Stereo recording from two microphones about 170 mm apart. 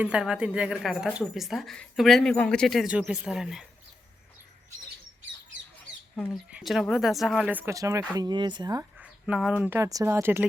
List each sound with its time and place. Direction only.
0.0 s speech: 5° right (ahead or behind)
6.3 s speech: centre (ahead or behind); by 8.8 s 25° right (ahead or behind)
8.8 s a sound: 10° right (ahead or behind)
9.6 s speech: 15° right (ahead or behind)